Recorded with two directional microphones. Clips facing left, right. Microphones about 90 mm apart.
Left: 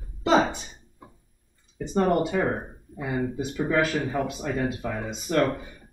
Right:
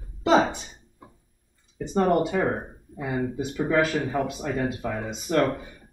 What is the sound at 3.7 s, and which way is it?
Speech, 15° right (ahead or behind).